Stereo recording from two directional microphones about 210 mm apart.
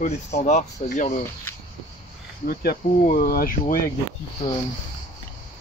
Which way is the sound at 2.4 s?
45° left (ahead or behind).